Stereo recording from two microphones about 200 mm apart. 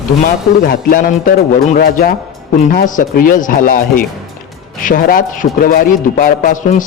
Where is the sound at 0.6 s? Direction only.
45° left (ahead or behind).